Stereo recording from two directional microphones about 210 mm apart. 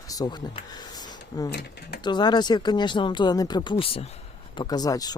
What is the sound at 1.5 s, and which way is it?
Speech, 50° left (ahead or behind).